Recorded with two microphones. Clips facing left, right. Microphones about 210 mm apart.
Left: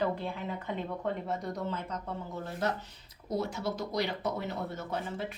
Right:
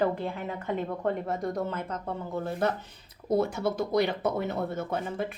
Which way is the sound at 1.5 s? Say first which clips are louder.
Right 4 dB; 55° right (ahead or behind).